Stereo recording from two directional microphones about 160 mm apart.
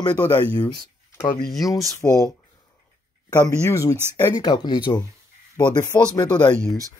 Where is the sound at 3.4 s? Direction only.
20° left (ahead or behind).